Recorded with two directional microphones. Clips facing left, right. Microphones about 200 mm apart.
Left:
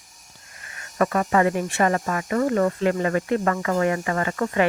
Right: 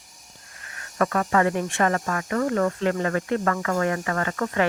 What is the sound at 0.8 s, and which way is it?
Speech, 10° left (ahead or behind).